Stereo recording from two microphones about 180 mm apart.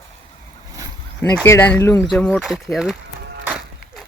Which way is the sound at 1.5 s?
10° left (ahead or behind).